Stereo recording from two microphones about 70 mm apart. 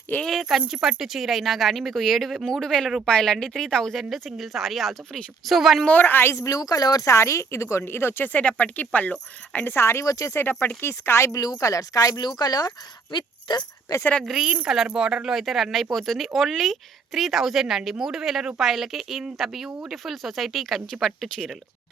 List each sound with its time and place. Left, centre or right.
0.3 s speech: centre
5.9 s speech: left
6.3 s speech: left
9.6 s speech: left
10.3 s speech: left
11.6 s speech: left
13.9 s speech: left
14.3 s speech: centre